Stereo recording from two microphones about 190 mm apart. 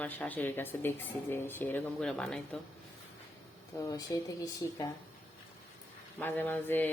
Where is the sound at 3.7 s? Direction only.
15° left (ahead or behind).